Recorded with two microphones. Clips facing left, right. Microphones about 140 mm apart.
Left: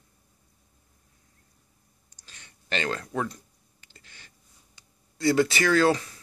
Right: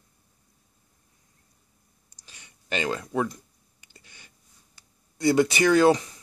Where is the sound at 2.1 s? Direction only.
15° right (ahead or behind).